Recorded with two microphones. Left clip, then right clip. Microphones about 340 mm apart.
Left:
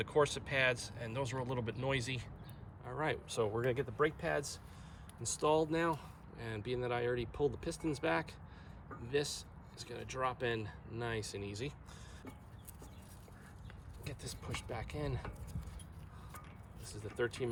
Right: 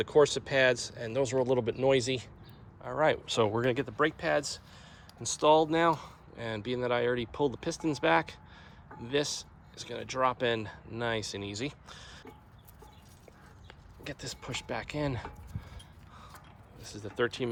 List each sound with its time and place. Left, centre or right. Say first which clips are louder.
0.0 s speech: right 8 dB; centre
14.0 s speech: right 8 dB; right
16.8 s speech: right 7 dB; right